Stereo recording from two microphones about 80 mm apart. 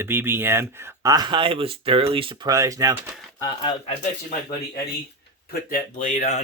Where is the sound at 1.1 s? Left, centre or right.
Right.